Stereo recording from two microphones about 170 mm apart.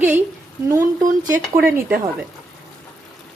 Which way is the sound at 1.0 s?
50° right (ahead or behind).